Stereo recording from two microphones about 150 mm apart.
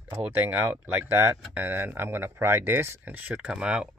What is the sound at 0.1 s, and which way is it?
Speech, 15° right (ahead or behind).